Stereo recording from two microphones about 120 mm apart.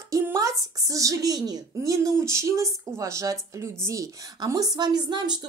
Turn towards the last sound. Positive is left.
turn(degrees=-40)  # may be behind; listen again after turning